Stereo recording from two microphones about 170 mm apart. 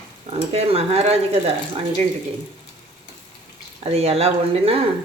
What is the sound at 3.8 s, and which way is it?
Speech, 35° right (ahead or behind).